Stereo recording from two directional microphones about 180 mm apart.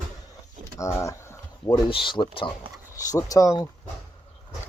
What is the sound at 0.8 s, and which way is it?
Speech, 15° left (ahead or behind).